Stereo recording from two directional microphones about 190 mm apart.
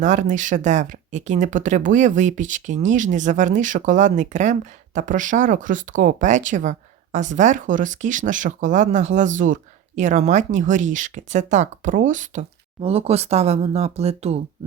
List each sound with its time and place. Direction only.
0.0 s speech: 40° right (ahead or behind)